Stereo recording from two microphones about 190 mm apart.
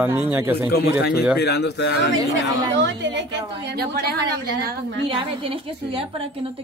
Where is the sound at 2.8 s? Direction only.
70° right (ahead or behind).